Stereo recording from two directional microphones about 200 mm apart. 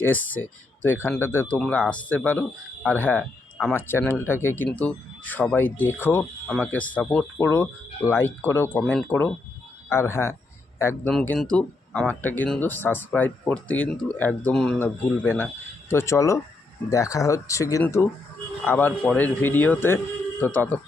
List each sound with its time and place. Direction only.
0.0 s speech: 10° left (ahead or behind)
11.1 s speech: 5° left (ahead or behind)